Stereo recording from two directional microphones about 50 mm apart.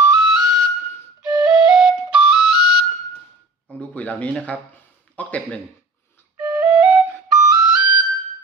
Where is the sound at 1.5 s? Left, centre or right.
Centre.